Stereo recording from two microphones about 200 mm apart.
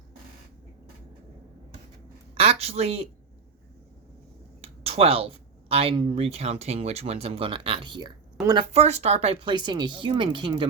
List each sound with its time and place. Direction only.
2.3 s a woman's voice: 30° right (ahead or behind)
4.6 s speech: 30° right (ahead or behind)